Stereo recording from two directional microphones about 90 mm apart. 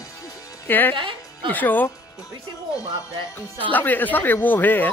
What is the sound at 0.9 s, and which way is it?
Music, 65° right (ahead or behind).